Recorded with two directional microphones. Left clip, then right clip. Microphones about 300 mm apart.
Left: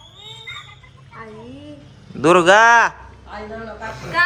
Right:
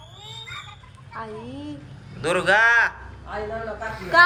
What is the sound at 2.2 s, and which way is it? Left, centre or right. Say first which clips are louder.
Speech: left 7 dB; left.